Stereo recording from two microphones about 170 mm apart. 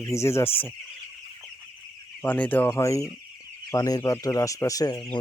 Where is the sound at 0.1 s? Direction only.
15° left (ahead or behind).